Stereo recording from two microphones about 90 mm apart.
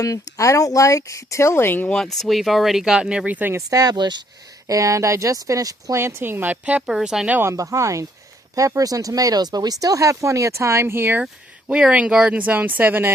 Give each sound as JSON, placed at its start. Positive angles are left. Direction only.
{"t": 0.0, "sound": "speech", "side_deg": 40}
{"t": 1.9, "sound": "speech", "side_deg": 5}
{"t": 3.7, "sound": "speech", "side_deg": -45}
{"t": 4.7, "sound": "speech", "side_deg": -40}
{"t": 7.3, "sound": "speech", "side_deg": -20}
{"t": 7.5, "sound": "speech", "side_deg": -35}
{"t": 11.7, "sound": "speech", "side_deg": -10}